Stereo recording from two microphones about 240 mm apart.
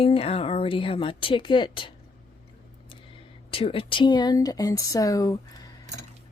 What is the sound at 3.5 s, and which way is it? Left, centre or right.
Speech, left.